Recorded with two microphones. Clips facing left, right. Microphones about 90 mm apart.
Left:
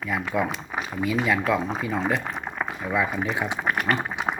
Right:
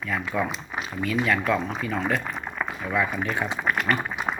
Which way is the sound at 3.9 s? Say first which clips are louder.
Left 1 dB; 25° left (ahead or behind).